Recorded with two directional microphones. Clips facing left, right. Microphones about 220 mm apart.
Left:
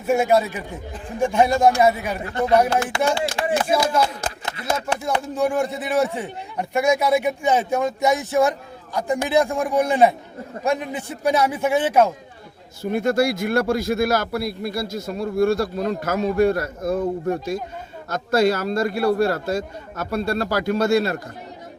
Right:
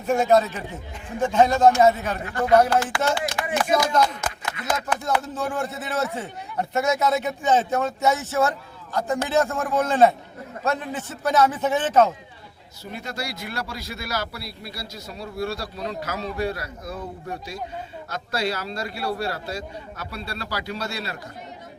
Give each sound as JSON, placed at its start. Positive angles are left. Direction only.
{"t": 0.0, "sound": "speech", "side_deg": 10}
{"t": 3.2, "sound": "speech", "side_deg": 25}
{"t": 4.0, "sound": "a sound", "side_deg": 30}
{"t": 5.2, "sound": "speech", "side_deg": 15}
{"t": 12.8, "sound": "speech", "side_deg": 50}